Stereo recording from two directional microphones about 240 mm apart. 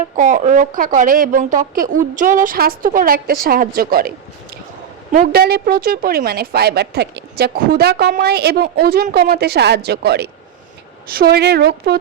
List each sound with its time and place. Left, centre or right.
0.2 s a woman's voice: right
5.1 s a woman's voice: right